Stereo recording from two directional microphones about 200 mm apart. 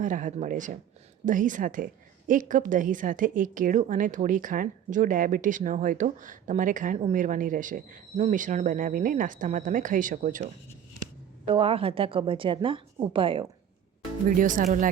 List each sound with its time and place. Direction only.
0.0 s a woman's voice: 40° right (ahead or behind)
11.4 s a woman's voice: 30° right (ahead or behind)
14.3 s a woman's voice: 40° right (ahead or behind)